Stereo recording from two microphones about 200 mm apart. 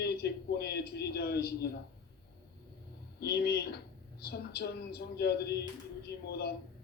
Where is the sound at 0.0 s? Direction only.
55° left (ahead or behind).